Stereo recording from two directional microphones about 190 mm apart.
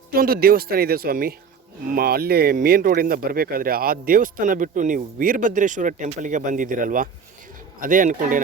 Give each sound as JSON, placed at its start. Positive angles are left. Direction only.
{"t": 0.1, "sound": "speech", "side_deg": -55}